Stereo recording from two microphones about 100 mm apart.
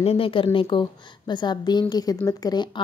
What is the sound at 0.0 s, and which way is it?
Speech, 80° left.